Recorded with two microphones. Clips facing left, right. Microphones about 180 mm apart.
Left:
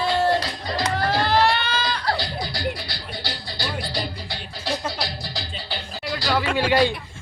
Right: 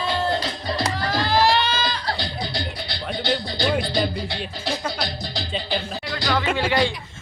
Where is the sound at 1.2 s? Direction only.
60° left (ahead or behind).